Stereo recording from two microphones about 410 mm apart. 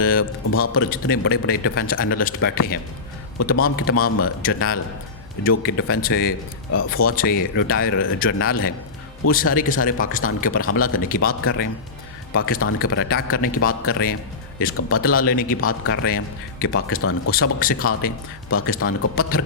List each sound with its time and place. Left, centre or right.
0.0 s speech: left
17.3 s speech: left